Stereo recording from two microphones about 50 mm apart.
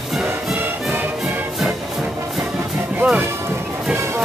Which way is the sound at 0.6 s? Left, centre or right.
Right.